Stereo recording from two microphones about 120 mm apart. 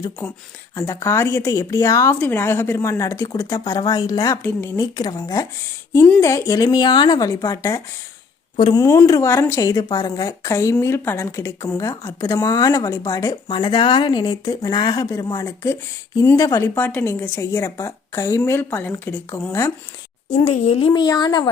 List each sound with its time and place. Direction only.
0.8 s a woman's voice: 25° left (ahead or behind)
2.1 s a woman's voice: 15° left (ahead or behind)
13.5 s a woman's voice: 40° left (ahead or behind); by 19.5 s 15° left (ahead or behind)
20.3 s a woman's voice: 55° left (ahead or behind)
20.9 s speech: 35° left (ahead or behind)